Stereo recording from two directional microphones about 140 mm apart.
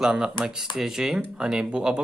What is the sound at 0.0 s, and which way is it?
A man's voice, 5° right (ahead or behind).